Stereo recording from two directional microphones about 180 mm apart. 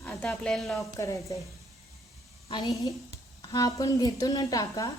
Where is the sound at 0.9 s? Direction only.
15° left (ahead or behind).